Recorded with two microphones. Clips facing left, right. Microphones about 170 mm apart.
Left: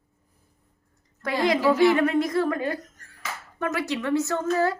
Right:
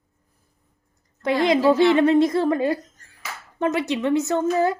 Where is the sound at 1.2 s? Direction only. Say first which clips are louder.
Right 4 dB; 20° right (ahead or behind).